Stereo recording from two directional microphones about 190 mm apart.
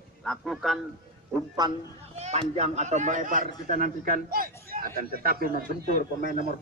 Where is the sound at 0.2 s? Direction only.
5° left (ahead or behind).